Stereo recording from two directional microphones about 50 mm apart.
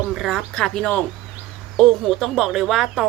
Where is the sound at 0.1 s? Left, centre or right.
Centre.